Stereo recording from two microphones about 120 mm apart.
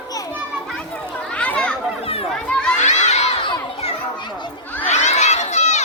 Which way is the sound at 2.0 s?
55° left (ahead or behind).